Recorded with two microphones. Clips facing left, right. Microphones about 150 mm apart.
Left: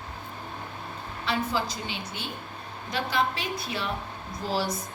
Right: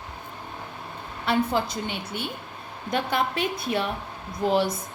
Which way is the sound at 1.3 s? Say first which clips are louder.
Right 5 dB; 55° right (ahead or behind).